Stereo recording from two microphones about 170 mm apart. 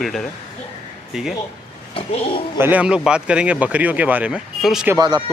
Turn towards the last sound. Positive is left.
turn(degrees=-25)  # may be behind; listen again after turning